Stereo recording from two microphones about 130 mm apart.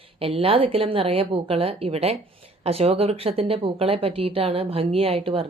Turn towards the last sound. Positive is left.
turn(degrees=-45)  # may be behind; listen again after turning